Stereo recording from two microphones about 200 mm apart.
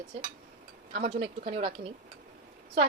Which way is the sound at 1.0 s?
30° right (ahead or behind).